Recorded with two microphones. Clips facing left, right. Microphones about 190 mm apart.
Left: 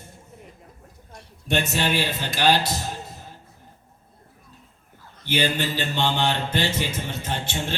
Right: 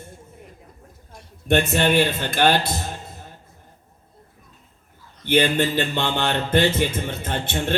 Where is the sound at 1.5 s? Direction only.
55° right (ahead or behind).